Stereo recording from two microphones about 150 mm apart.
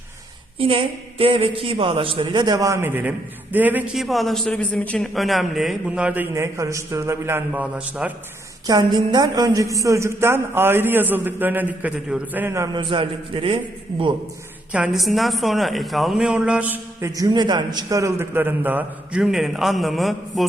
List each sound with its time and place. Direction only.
0.6 s a woman's voice: 35° right (ahead or behind); by 4.0 s 10° right (ahead or behind)
4.0 s a woman's voice: centre (ahead or behind)
6.3 s speech: 20° right (ahead or behind)
8.6 s speech: 30° right (ahead or behind)
12.7 s a woman's voice: 35° right (ahead or behind)
14.7 s a woman's voice: 5° right (ahead or behind)
17.1 s speech: 25° right (ahead or behind); by 20.5 s centre (ahead or behind)